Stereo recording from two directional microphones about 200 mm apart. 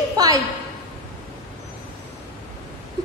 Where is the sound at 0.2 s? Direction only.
20° right (ahead or behind).